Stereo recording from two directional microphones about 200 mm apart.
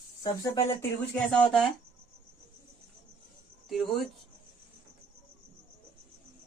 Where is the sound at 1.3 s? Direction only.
Centre (ahead or behind).